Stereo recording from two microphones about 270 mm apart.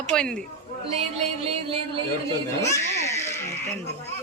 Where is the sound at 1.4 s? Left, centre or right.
Centre.